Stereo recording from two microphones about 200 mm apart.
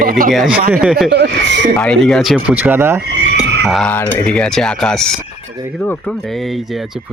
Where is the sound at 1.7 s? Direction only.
5° left (ahead or behind).